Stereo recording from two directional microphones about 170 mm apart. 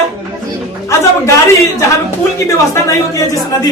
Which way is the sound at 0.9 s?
15° left (ahead or behind).